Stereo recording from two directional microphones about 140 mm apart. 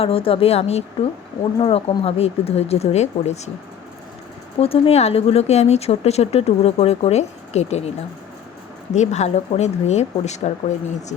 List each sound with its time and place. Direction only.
0.0 s speech: 40° left (ahead or behind)
4.6 s speech: 45° left (ahead or behind)
9.0 s speech: 55° left (ahead or behind)